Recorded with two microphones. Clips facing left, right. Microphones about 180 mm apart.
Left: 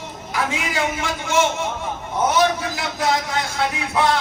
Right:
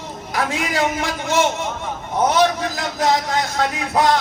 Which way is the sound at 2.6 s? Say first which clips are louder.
Right 2 dB; 40° right (ahead or behind).